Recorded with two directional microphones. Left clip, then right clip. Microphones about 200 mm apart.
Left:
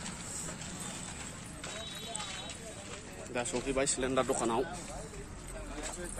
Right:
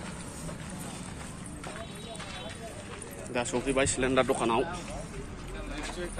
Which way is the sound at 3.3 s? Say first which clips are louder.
Right 5 dB; 5° left (ahead or behind).